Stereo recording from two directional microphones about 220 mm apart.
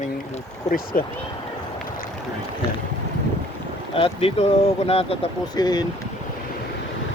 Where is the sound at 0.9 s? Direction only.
40° left (ahead or behind).